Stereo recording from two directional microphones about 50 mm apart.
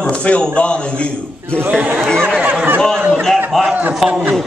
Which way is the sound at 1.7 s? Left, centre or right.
Right.